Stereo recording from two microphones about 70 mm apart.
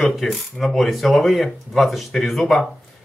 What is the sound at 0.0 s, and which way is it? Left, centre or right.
Speech, centre.